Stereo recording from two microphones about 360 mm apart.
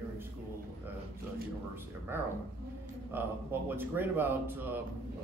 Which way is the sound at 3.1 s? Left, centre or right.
Centre.